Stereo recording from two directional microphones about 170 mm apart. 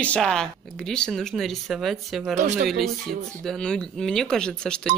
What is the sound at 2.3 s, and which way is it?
Speech, 45° right (ahead or behind).